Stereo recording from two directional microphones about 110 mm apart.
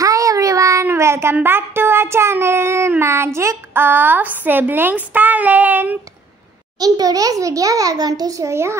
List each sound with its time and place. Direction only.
0.0 s a sound: 30° right (ahead or behind)
1.3 s child singing: 20° right (ahead or behind)
3.3 s a woman's voice: 20° right (ahead or behind)
6.8 s a child's voice: 35° right (ahead or behind)